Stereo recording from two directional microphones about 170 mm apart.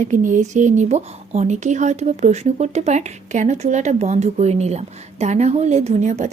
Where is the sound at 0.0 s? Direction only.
50° right (ahead or behind).